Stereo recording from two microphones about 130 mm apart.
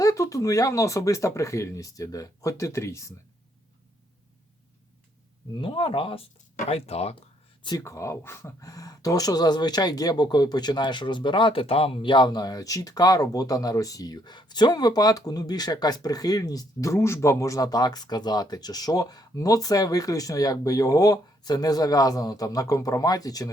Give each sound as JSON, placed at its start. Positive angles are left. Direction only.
{"t": 0.0, "sound": "speech", "side_deg": 25}
{"t": 5.5, "sound": "speech", "side_deg": 45}
{"t": 7.8, "sound": "speech", "side_deg": 20}